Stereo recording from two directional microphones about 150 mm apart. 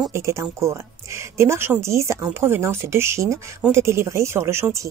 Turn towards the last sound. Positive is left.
turn(degrees=-15)  # may be behind; listen again after turning